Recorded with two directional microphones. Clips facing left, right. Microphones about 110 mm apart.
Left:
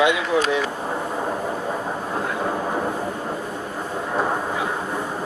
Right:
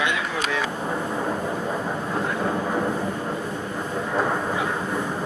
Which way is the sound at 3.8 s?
10° left (ahead or behind).